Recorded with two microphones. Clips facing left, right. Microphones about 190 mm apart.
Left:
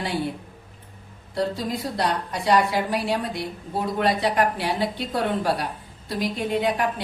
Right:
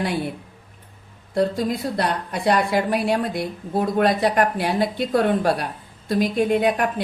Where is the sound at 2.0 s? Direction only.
50° right (ahead or behind).